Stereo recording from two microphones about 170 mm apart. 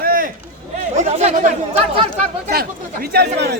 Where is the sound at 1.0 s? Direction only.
45° right (ahead or behind).